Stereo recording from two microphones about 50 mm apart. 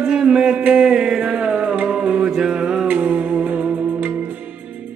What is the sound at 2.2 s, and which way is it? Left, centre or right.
Music, centre.